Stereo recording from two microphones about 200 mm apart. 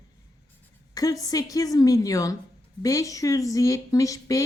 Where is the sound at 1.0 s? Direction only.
15° left (ahead or behind).